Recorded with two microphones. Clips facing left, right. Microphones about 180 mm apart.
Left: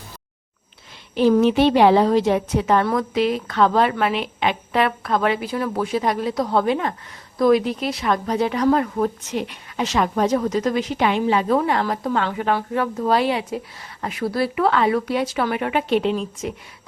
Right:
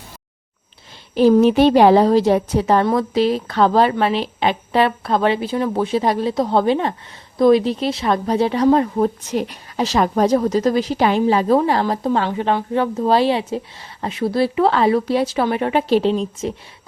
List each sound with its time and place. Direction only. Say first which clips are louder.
1.1 s a woman's voice: right 3 dB; 40° right (ahead or behind)
9.3 s a woman's voice: right 4 dB; 40° right (ahead or behind)